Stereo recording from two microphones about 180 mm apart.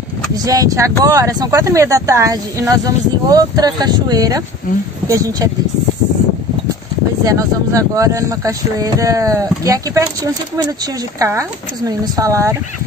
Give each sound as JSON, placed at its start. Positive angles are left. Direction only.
{"t": 0.4, "sound": "speech", "side_deg": -20}
{"t": 7.2, "sound": "speech", "side_deg": -20}